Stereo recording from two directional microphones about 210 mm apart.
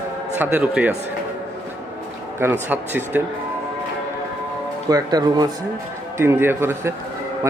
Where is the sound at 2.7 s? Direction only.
10° right (ahead or behind).